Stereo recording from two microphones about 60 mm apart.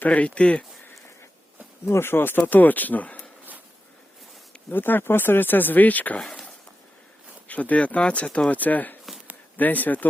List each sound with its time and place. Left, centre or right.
0.0 s speech: left
1.9 s speech: left
4.7 s speech: left
6.1 s a sound: centre
7.4 s speech: left